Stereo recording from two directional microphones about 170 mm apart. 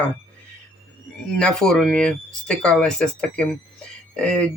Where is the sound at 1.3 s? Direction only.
5° left (ahead or behind).